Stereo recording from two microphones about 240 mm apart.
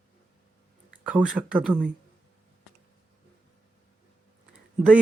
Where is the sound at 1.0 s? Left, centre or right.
Centre.